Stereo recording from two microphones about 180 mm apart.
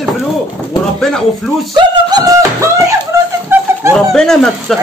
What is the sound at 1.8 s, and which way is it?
Beatboxing, 20° right (ahead or behind).